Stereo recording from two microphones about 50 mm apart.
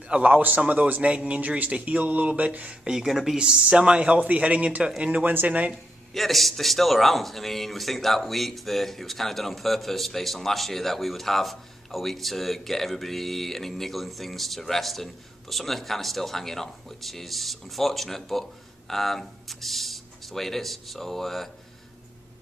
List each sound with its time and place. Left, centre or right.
0.1 s speech: right
2.8 s a man's voice: centre
3.3 s speech: centre
5.2 s speech: right
6.1 s a man's voice: centre